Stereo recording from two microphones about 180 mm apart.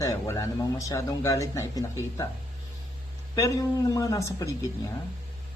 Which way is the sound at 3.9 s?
20° left (ahead or behind).